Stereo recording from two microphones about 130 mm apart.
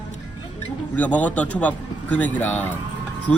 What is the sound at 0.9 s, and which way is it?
Speech, 10° left (ahead or behind).